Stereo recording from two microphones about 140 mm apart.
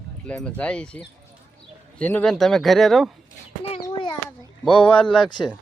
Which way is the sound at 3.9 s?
35° left (ahead or behind).